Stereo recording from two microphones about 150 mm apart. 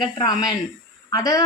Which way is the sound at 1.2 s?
25° left (ahead or behind).